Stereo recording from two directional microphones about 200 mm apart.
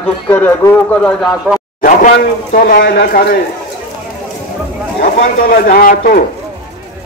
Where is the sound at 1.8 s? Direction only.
40° left (ahead or behind).